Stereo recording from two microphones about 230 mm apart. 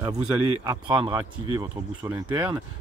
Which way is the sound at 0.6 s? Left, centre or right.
Centre.